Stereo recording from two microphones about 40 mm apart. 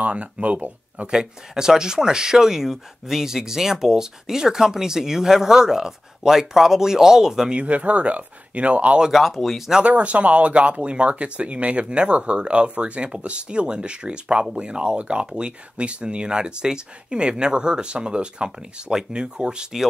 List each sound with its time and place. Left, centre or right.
0.0 s speech: right
1.0 s speech: centre
7.5 s speech: right
9.1 s speech: centre
9.8 s speech: right